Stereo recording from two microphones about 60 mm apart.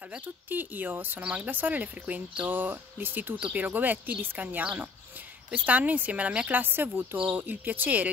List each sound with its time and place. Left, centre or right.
0.5 s a woman's voice: right
6.6 s a woman's voice: right